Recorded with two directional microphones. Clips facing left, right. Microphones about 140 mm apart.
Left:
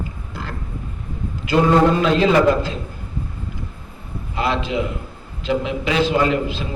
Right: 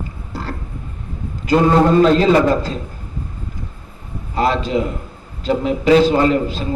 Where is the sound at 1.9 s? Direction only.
40° right (ahead or behind).